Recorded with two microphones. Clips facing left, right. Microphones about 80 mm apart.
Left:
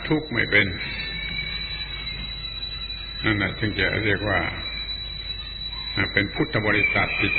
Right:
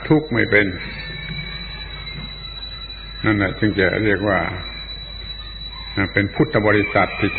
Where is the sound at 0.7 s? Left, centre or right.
Right.